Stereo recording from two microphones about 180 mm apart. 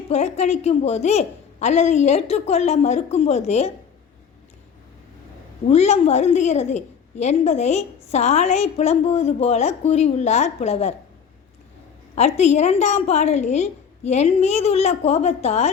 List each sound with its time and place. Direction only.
0.1 s a woman's voice: 35° left (ahead or behind)
5.6 s a woman's voice: 35° left (ahead or behind)
12.1 s a woman's voice: 35° left (ahead or behind)